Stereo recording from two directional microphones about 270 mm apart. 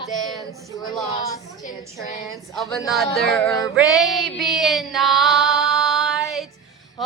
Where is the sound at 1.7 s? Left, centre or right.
Left.